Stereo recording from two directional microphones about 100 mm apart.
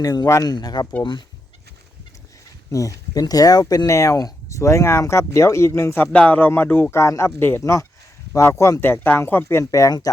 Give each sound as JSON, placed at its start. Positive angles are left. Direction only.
{"t": 0.0, "sound": "speech", "side_deg": 35}
{"t": 2.7, "sound": "speech", "side_deg": 35}
{"t": 6.1, "sound": "speech", "side_deg": 15}
{"t": 6.9, "sound": "speech", "side_deg": 30}